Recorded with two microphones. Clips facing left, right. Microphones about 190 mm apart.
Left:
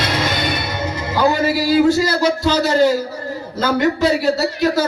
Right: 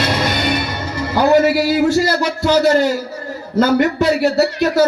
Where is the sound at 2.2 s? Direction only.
55° right (ahead or behind).